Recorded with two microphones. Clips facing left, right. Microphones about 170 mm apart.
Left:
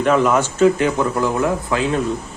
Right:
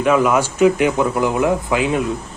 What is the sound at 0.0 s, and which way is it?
Speech, 5° right (ahead or behind).